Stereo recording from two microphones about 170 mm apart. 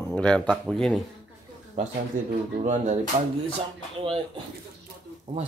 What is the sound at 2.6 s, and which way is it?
Speech, 45° right (ahead or behind).